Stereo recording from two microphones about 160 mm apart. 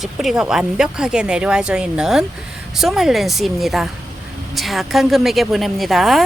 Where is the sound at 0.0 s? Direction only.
Centre (ahead or behind).